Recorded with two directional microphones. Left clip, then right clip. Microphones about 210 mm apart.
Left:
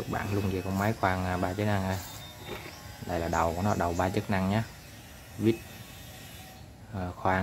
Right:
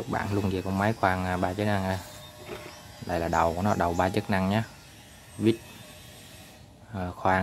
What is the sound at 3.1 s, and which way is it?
Speech, 15° right (ahead or behind).